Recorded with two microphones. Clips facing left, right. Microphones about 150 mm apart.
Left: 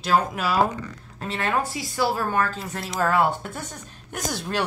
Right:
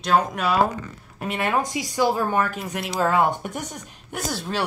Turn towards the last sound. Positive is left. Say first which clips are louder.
# even
turn(degrees=-10)  # may be behind; listen again after turning